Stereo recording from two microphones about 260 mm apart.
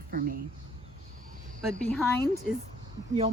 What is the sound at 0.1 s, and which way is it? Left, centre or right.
Speech, right.